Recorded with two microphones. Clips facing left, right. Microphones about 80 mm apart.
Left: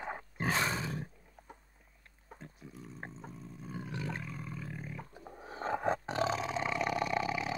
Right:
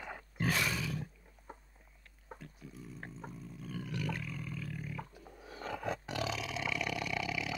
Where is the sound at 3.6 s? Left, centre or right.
Left.